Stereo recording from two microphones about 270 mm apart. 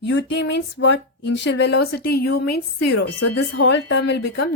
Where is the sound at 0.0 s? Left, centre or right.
Left.